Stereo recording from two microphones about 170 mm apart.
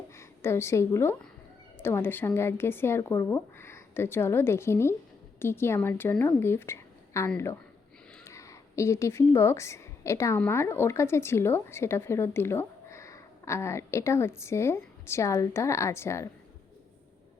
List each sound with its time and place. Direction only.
0.1 s a woman's voice: 15° left (ahead or behind)